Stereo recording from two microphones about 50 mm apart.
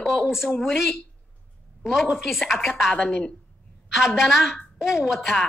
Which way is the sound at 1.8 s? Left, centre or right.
Centre.